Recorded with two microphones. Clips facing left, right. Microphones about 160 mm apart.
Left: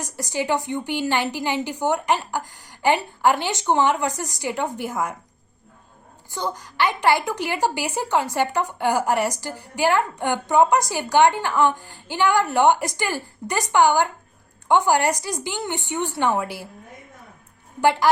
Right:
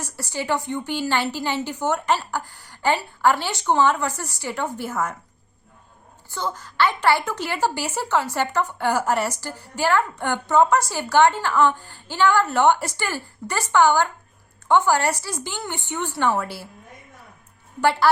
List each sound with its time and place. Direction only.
0.0 s a woman's voice: 15° left (ahead or behind)
6.3 s a woman's voice: 15° left (ahead or behind)
17.7 s a woman's voice: 15° left (ahead or behind)